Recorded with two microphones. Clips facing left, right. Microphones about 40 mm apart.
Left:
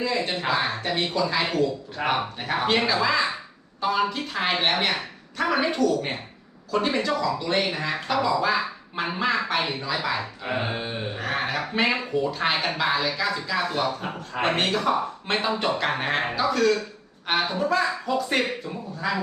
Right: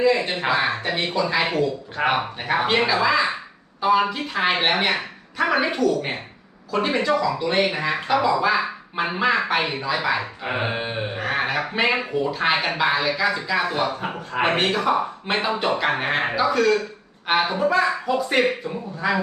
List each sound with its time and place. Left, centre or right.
0.0 s speech: centre
1.5 s speech: right
11.2 s speech: centre
14.4 s speech: centre